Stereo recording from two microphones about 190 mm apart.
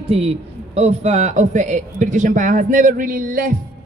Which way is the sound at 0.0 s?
30° right (ahead or behind).